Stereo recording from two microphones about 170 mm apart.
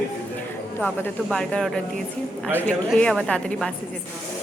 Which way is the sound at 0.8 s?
10° left (ahead or behind).